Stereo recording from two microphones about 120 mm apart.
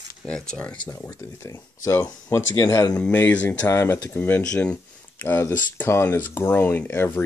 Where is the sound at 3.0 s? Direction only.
10° left (ahead or behind).